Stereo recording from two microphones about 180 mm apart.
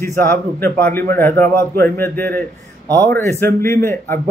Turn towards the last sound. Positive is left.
turn(degrees=15)  # may be behind; listen again after turning